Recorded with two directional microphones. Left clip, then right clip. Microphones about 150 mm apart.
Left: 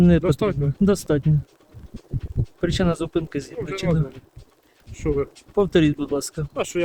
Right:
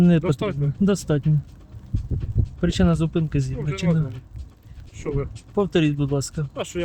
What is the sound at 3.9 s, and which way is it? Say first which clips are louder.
Speech: left 2 dB; 25° left (ahead or behind).